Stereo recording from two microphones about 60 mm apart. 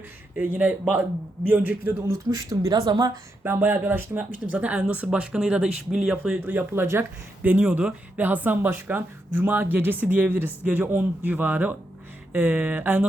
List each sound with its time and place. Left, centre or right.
0.3 s speech: right
2.0 s speech: right
3.4 s speech: right; by 6.4 s centre
6.4 s speech: right
7.4 s speech: right
12.3 s speech: centre